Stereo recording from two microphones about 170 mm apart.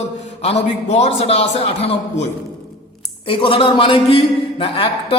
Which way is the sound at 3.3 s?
30° left (ahead or behind).